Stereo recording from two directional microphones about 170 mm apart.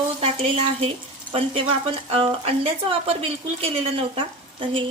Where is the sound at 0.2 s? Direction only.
35° right (ahead or behind).